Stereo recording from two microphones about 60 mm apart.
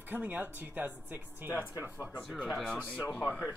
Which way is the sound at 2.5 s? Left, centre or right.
Centre.